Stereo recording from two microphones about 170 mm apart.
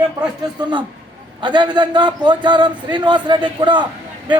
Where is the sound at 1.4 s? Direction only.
25° right (ahead or behind).